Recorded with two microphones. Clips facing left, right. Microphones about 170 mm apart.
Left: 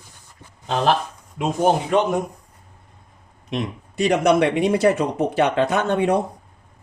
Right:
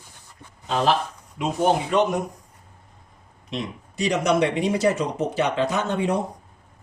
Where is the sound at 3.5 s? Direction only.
55° left (ahead or behind).